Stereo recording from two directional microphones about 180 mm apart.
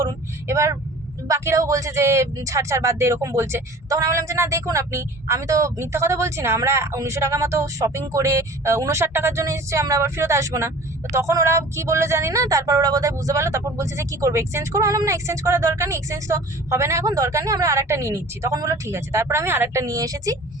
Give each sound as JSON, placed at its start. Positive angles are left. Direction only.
{"t": 0.0, "sound": "speech", "side_deg": -15}